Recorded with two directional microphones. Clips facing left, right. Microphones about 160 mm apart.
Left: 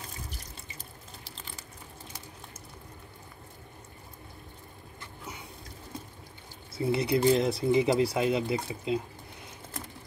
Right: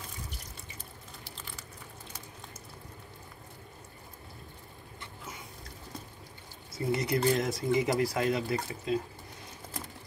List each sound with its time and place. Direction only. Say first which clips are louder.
6.8 s speech: left 3 dB; 15° left (ahead or behind)